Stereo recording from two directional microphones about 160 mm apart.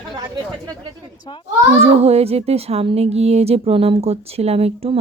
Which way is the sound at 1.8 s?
40° right (ahead or behind).